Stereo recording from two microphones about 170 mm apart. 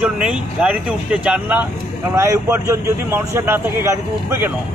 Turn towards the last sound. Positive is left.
turn(degrees=-15)  # may be behind; listen again after turning